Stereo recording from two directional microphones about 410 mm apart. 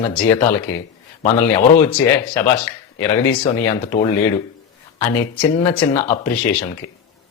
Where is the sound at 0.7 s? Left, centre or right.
Centre.